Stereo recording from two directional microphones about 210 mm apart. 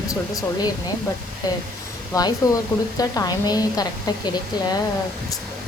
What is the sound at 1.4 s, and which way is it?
Speech, 20° left (ahead or behind).